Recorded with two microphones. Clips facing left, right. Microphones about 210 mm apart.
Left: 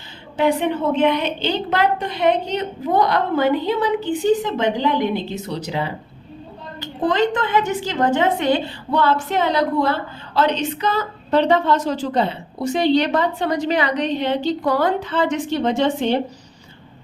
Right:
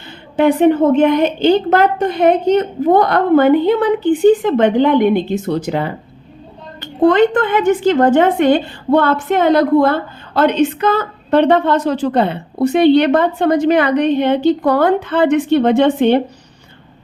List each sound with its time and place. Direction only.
0.3 s a woman's voice: 50° right (ahead or behind)